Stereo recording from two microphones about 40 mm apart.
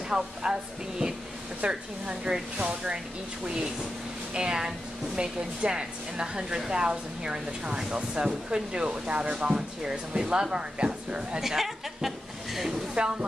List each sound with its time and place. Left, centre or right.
0.1 s a woman's voice: centre
11.4 s a woman's voice: centre
13.0 s a woman's voice: right